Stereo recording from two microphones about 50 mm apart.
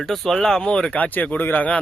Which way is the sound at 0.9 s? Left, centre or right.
Left.